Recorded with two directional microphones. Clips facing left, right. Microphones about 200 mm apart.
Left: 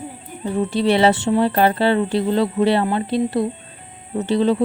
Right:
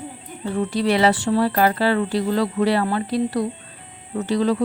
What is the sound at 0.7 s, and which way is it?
A woman's voice, 25° left (ahead or behind).